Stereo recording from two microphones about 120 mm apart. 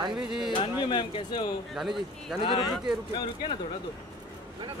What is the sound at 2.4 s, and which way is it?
Speech, 35° left (ahead or behind).